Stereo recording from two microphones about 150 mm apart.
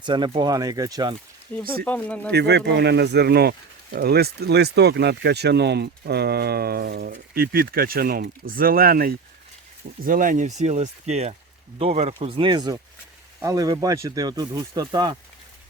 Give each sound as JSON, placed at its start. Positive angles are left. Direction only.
{"t": 0.0, "sound": "speech", "side_deg": -30}
{"t": 1.8, "sound": "speech", "side_deg": 10}
{"t": 2.3, "sound": "speech", "side_deg": -90}
{"t": 10.0, "sound": "speech", "side_deg": -65}